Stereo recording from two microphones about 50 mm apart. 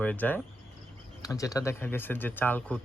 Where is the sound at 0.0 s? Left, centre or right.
Left.